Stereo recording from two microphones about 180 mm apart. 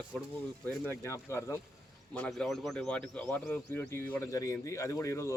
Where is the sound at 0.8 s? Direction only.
15° left (ahead or behind).